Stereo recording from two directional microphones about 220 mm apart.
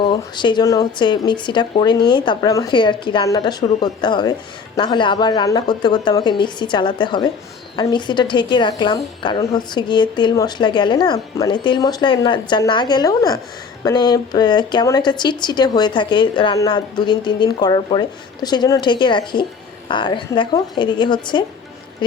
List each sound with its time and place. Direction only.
0.0 s a woman's voice: 20° left (ahead or behind)